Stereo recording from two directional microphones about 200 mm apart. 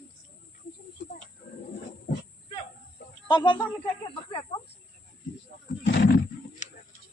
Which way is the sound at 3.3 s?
20° left (ahead or behind).